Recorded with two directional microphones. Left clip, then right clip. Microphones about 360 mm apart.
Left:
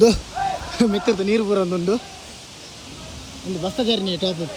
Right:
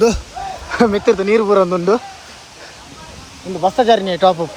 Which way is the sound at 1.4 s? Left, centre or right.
Right.